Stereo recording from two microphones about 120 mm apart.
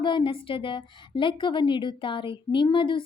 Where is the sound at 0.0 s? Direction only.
45° left (ahead or behind).